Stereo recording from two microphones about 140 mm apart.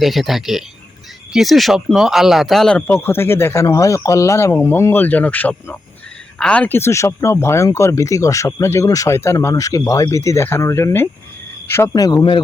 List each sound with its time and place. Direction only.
0.0 s speech: centre (ahead or behind); by 12.4 s 35° left (ahead or behind)